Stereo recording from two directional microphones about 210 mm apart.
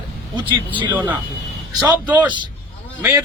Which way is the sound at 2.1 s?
20° right (ahead or behind).